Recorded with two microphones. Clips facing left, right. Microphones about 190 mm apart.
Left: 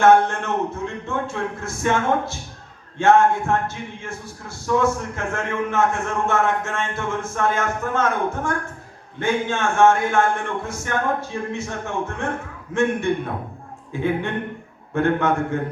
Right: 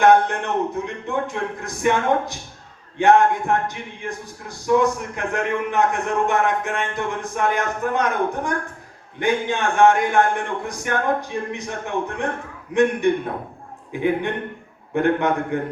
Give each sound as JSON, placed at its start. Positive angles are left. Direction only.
{"t": 0.0, "sound": "speech", "side_deg": -15}